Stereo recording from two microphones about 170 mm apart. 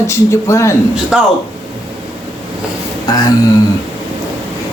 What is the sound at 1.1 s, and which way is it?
Speech, 5° right (ahead or behind).